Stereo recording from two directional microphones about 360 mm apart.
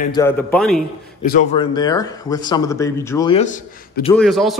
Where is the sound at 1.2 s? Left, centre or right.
Centre.